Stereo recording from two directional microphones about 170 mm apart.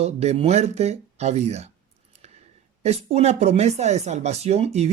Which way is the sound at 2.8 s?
40° right (ahead or behind).